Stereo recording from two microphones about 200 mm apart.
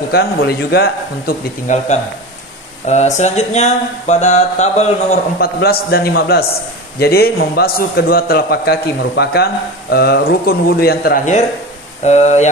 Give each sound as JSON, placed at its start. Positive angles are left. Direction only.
{"t": 0.1, "sound": "a man's voice", "side_deg": 50}
{"t": 1.7, "sound": "speech", "side_deg": 40}
{"t": 2.9, "sound": "speech", "side_deg": 35}
{"t": 5.4, "sound": "a man's voice", "side_deg": 50}
{"t": 12.0, "sound": "speech", "side_deg": 35}